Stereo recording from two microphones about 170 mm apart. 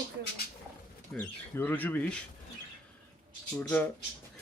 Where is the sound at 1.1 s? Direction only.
10° left (ahead or behind).